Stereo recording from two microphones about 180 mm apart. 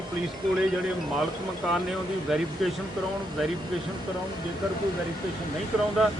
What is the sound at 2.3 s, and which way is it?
Speech, centre (ahead or behind).